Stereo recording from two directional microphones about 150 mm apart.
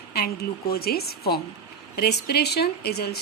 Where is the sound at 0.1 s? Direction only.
90° left.